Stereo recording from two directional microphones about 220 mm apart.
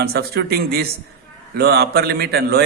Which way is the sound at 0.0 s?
45° right (ahead or behind).